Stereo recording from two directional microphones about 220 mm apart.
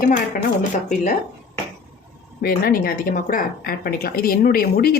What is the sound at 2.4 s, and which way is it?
A woman's voice, 40° left (ahead or behind).